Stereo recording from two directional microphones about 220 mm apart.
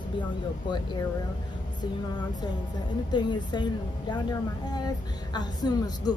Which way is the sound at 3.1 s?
20° left (ahead or behind).